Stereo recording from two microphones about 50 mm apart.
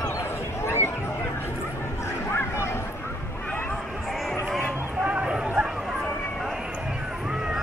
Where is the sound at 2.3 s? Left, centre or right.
Left.